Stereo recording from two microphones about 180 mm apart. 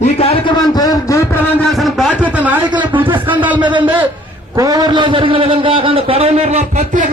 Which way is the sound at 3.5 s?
25° right (ahead or behind).